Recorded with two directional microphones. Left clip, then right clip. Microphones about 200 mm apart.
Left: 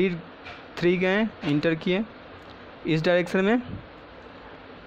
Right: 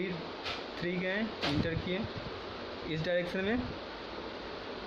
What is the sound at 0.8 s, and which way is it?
Speech, 35° left (ahead or behind).